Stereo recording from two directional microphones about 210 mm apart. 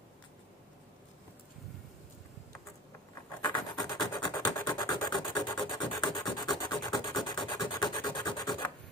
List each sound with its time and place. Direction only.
3.5 s rub: 20° left (ahead or behind)